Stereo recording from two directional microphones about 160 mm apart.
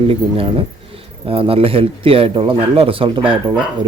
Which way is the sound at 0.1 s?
35° right (ahead or behind).